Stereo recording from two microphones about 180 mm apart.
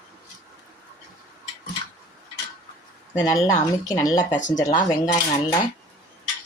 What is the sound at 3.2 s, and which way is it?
Speech, 20° left (ahead or behind).